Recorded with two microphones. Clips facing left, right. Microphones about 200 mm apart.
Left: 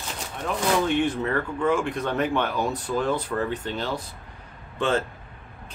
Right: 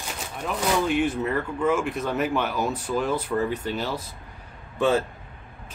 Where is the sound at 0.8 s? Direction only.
5° right (ahead or behind).